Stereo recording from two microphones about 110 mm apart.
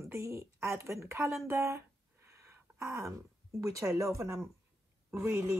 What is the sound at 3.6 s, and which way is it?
Speech, 30° right (ahead or behind).